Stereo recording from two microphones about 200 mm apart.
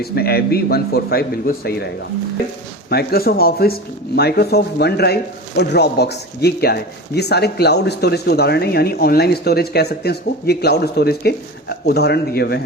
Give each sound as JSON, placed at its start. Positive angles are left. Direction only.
{"t": 0.0, "sound": "speech", "side_deg": 50}
{"t": 2.9, "sound": "speech", "side_deg": 50}